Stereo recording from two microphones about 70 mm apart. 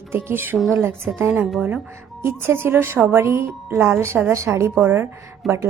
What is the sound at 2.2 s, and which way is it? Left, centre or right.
Speech, right.